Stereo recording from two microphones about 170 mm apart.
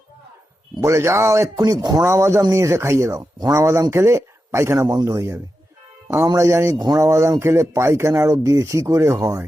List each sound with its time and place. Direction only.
0.8 s speech: 15° right (ahead or behind)